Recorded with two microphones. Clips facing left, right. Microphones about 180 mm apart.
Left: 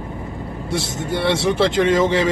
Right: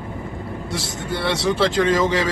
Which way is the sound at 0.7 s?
25° left (ahead or behind).